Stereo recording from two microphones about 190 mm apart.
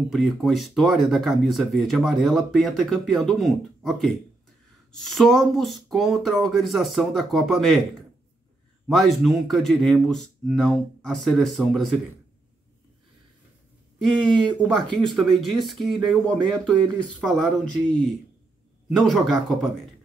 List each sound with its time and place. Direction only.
0.1 s speech: centre (ahead or behind)
8.8 s speech: centre (ahead or behind)
14.6 s speech: 5° left (ahead or behind)
18.9 s speech: centre (ahead or behind)